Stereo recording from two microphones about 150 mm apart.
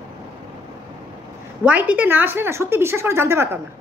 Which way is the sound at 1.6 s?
10° right (ahead or behind).